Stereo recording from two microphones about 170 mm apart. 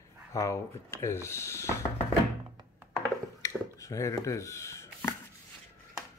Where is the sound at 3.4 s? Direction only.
20° left (ahead or behind).